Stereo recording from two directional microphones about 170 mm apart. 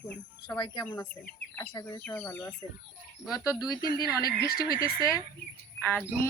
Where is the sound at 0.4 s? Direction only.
25° left (ahead or behind).